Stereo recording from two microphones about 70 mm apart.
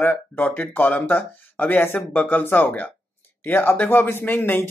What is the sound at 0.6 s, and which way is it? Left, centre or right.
Speech, left.